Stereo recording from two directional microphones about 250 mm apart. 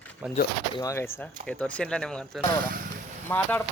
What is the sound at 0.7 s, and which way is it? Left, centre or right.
Speech, centre.